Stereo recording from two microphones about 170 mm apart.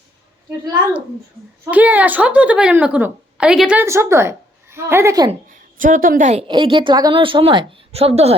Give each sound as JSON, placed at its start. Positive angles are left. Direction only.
{"t": 1.7, "sound": "a woman's voice", "side_deg": -10}
{"t": 5.7, "sound": "a woman's voice", "side_deg": -50}
{"t": 6.5, "sound": "a woman's voice", "side_deg": -30}